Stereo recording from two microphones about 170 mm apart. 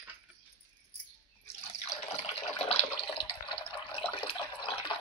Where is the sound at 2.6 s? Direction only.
35° left (ahead or behind).